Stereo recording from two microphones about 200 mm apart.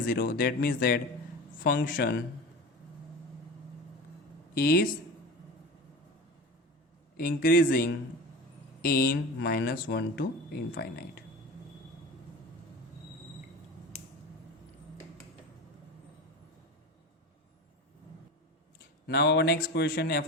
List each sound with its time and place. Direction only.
0.1 s speech: 45° left (ahead or behind)
4.5 s speech: 45° left (ahead or behind)
7.2 s speech: 45° left (ahead or behind)
8.8 s speech: 50° left (ahead or behind)
19.0 s speech: 55° left (ahead or behind)